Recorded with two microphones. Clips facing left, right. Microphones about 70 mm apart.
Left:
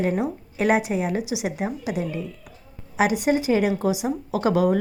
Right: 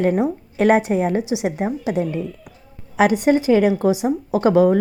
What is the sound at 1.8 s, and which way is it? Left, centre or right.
Speech, centre.